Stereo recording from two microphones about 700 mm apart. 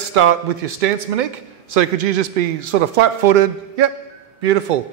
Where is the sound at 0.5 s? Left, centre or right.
Right.